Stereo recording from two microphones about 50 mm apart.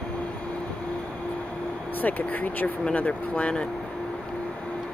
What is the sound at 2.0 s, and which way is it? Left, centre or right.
Speech, left.